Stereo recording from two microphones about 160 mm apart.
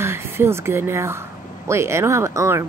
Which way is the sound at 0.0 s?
15° right (ahead or behind).